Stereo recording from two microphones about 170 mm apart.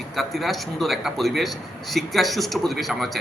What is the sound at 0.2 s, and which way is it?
Speech, centre (ahead or behind).